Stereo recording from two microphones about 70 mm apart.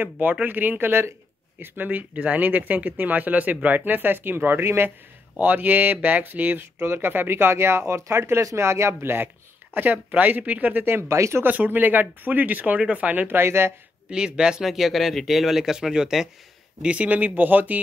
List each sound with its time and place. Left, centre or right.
0.0 s speech: right
11.0 s speech: right
11.4 s speech: right
14.1 s speech: centre
16.8 s speech: centre